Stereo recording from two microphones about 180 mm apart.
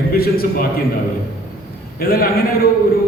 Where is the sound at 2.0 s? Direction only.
55° left (ahead or behind).